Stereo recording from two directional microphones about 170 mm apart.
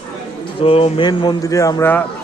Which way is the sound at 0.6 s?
30° left (ahead or behind).